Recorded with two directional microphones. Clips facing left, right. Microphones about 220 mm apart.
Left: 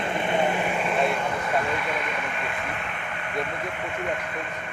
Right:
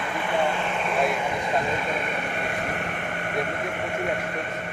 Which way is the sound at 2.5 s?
45° right (ahead or behind).